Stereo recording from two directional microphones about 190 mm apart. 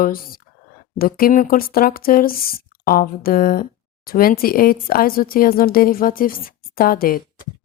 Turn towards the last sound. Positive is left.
turn(degrees=50)  # may be behind; listen again after turning